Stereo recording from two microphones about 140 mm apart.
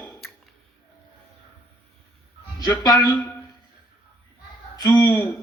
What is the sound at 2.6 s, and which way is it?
Speech, 30° left (ahead or behind).